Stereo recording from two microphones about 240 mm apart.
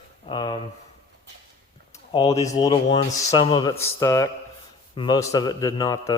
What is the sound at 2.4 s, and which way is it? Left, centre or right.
Speech, centre.